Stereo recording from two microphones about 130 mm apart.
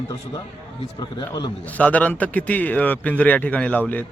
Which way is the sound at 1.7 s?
10° left (ahead or behind).